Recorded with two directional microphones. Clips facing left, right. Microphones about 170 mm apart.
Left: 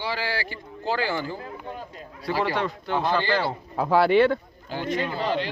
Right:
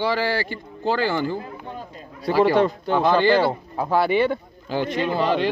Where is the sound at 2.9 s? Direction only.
60° right (ahead or behind).